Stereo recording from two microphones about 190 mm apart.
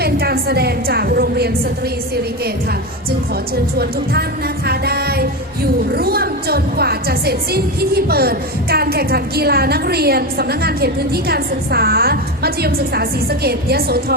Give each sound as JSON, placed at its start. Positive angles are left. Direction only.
{"t": 0.0, "sound": "a woman's voice", "side_deg": -55}
{"t": 3.8, "sound": "a woman's voice", "side_deg": -55}